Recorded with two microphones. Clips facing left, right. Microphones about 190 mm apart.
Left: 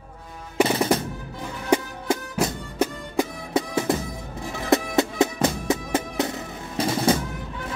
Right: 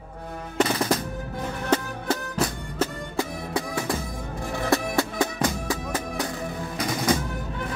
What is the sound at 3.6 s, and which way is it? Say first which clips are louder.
Music: left 5 dB; 25° left (ahead or behind).